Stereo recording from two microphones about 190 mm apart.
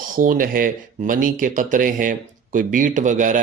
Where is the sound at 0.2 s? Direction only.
45° right (ahead or behind).